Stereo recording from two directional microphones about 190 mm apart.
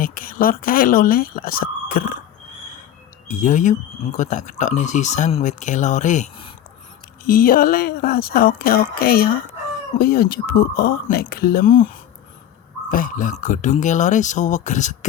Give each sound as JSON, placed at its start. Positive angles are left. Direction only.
{"t": 0.0, "sound": "speech", "side_deg": 45}
{"t": 3.2, "sound": "speech", "side_deg": 40}
{"t": 12.9, "sound": "speech", "side_deg": 45}